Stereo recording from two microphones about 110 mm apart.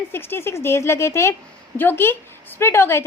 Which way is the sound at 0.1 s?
20° left (ahead or behind).